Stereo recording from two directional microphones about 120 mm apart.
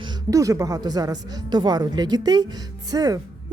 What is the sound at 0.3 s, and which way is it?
A woman's voice, 30° right (ahead or behind).